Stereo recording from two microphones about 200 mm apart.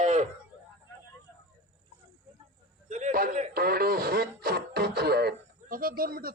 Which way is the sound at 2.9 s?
35° right (ahead or behind).